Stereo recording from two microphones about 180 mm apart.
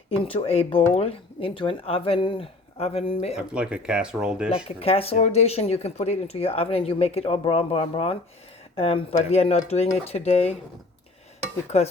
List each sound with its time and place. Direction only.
0.1 s speech: 30° left (ahead or behind)
3.5 s speech: 5° right (ahead or behind)
4.4 s speech: 35° left (ahead or behind)
11.7 s speech: 35° left (ahead or behind)